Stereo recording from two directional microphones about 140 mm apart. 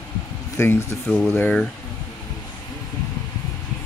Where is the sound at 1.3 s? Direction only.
15° left (ahead or behind).